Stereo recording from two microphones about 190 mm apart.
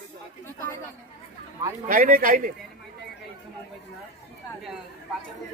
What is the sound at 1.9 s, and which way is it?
Speech, 45° right (ahead or behind).